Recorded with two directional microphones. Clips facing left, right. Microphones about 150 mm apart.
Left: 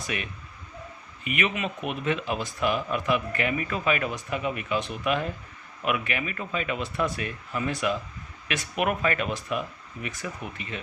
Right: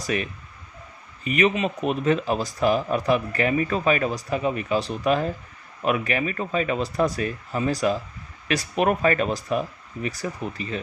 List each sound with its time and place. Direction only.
0.0 s speech: 40° right (ahead or behind)